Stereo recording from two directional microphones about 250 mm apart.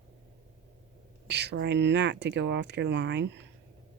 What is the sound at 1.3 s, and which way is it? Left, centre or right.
Speech, right.